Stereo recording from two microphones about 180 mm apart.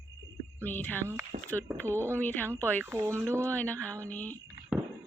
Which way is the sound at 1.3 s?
45° right (ahead or behind).